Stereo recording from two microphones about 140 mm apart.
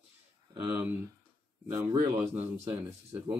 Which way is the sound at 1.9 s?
25° right (ahead or behind).